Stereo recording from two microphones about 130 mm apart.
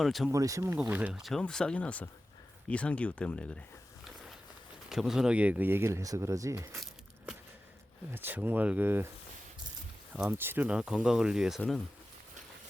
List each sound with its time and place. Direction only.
0.0 s speech: centre (ahead or behind)
0.3 s speech: 25° right (ahead or behind)
0.8 s speech: 10° right (ahead or behind)
1.2 s speech: 5° left (ahead or behind)
4.9 s speech: 5° right (ahead or behind); by 6.7 s 25° right (ahead or behind)
8.1 s speech: 15° right (ahead or behind)
10.2 s speech: 15° right (ahead or behind)